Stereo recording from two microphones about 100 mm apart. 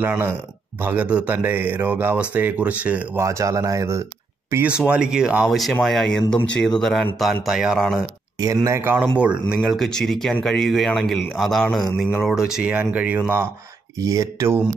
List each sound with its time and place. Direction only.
0.0 s speech: 20° right (ahead or behind)
3.2 s speech: 30° right (ahead or behind)
4.6 s speech: 10° right (ahead or behind)
8.6 s speech: 25° right (ahead or behind)
9.2 s speech: 10° right (ahead or behind)
9.7 s speech: 5° left (ahead or behind); by 13.2 s 15° right (ahead or behind)
13.9 s speech: 35° right (ahead or behind)